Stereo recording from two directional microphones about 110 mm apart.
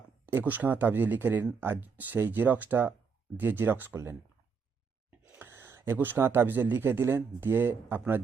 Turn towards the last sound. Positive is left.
turn(degrees=-20)  # may be behind; listen again after turning